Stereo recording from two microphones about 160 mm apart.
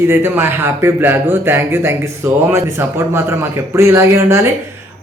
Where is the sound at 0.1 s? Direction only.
15° right (ahead or behind).